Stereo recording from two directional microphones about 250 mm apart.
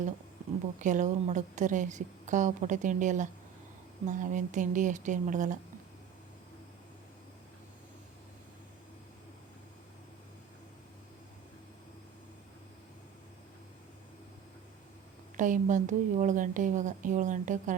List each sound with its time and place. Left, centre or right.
0.8 s a woman's voice: right
15.4 s a woman's voice: right